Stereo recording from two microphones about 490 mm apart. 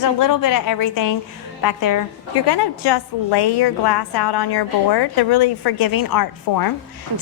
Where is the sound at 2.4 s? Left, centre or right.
Left.